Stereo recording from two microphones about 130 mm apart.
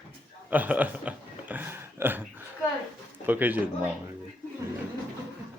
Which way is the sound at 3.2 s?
15° right (ahead or behind).